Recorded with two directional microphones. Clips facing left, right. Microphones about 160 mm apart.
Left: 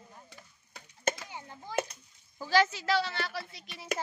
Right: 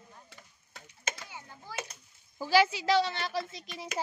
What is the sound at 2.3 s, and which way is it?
A woman's voice, 10° right (ahead or behind).